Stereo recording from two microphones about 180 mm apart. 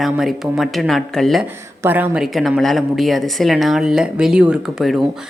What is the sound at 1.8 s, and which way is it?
A woman's voice, 10° right (ahead or behind).